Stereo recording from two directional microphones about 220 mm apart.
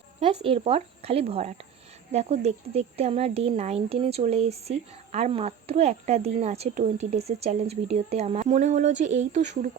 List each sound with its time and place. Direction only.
0.4 s speech: 25° right (ahead or behind)